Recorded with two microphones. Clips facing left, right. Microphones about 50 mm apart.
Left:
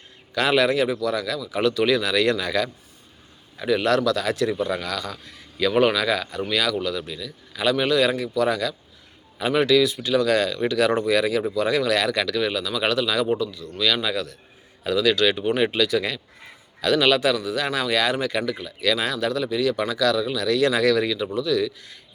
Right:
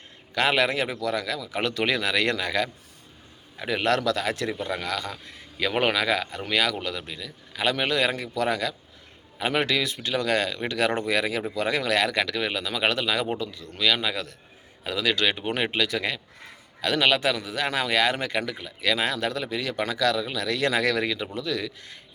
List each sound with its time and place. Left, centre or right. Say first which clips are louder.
0.3 s a man's voice: left 3 dB; right